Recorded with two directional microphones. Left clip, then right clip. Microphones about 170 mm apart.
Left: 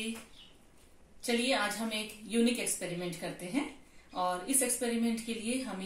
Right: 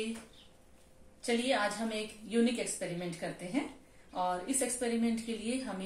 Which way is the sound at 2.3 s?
Centre (ahead or behind).